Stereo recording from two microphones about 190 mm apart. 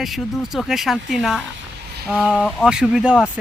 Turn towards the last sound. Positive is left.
turn(degrees=-5)  # may be behind; listen again after turning